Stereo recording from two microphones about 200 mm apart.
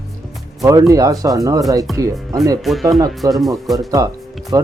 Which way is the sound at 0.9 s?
15° right (ahead or behind).